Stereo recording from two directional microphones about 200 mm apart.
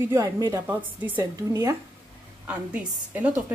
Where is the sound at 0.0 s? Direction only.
15° right (ahead or behind).